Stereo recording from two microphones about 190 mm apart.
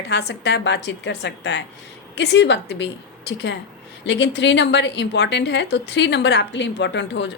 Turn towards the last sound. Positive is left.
turn(degrees=65)  # may be behind; listen again after turning